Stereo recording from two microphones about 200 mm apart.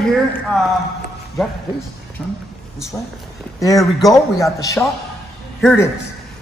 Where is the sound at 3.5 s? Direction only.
15° left (ahead or behind).